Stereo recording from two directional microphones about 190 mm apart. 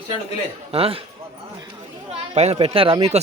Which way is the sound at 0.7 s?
30° right (ahead or behind).